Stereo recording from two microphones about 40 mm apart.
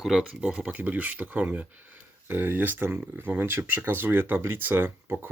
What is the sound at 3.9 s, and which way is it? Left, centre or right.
Speech, right.